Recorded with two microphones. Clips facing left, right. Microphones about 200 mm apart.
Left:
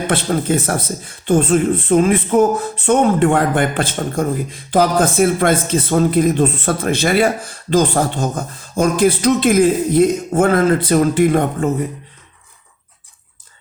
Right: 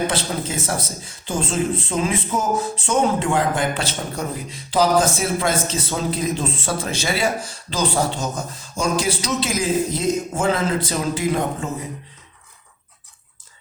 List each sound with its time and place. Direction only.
0.1 s speech: 55° left (ahead or behind)